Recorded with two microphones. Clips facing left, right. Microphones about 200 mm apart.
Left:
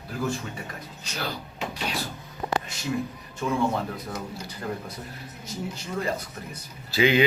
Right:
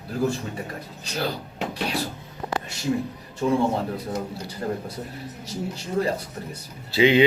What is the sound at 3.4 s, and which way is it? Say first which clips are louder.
Speech: right 4 dB; 30° right (ahead or behind).